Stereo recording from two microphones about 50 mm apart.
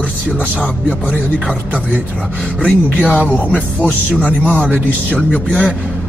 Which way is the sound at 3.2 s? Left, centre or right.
Right.